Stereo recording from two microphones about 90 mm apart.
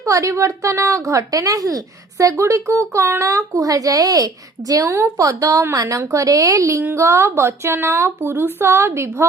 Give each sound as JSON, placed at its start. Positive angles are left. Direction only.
{"t": 0.0, "sound": "a woman's voice", "side_deg": -35}